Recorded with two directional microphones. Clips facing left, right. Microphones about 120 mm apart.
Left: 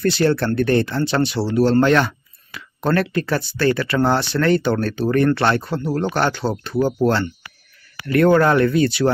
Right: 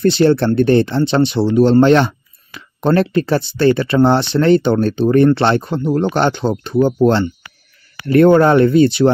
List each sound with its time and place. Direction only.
0.0 s speech: 25° right (ahead or behind)